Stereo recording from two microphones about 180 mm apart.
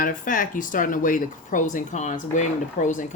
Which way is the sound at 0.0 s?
50° left (ahead or behind).